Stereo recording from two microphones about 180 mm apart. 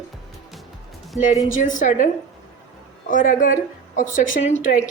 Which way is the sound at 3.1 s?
50° left (ahead or behind).